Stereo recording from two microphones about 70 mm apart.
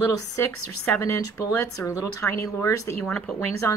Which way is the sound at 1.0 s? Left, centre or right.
Left.